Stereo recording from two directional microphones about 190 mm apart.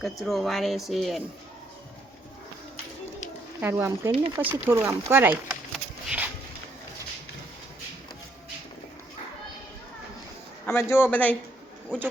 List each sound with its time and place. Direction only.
0.0 s speech: centre (ahead or behind)
3.6 s speech: 10° right (ahead or behind)
4.1 s speech: 30° right (ahead or behind)
4.5 s speech: 10° right (ahead or behind)
5.7 s a sound: 5° right (ahead or behind)
10.7 s a man's voice: 10° left (ahead or behind)